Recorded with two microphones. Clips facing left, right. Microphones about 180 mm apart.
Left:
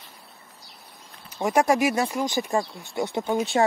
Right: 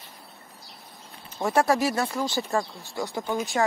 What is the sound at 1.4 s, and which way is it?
Speech, 15° left (ahead or behind).